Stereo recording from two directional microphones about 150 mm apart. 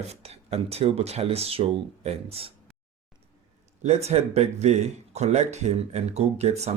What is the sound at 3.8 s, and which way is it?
Speech, 45° right (ahead or behind).